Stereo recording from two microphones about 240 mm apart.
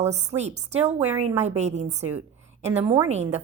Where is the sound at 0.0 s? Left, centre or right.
Right.